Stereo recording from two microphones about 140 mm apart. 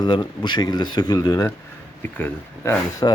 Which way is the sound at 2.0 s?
15° left (ahead or behind).